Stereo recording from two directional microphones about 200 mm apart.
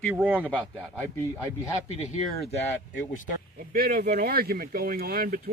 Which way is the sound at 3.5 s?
50° right (ahead or behind).